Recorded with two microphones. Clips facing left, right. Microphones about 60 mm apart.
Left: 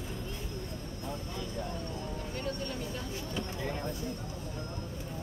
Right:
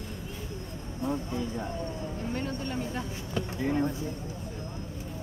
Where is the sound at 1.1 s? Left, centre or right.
Right.